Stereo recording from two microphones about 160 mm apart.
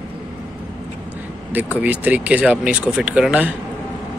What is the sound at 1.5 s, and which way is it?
Speech, 10° right (ahead or behind).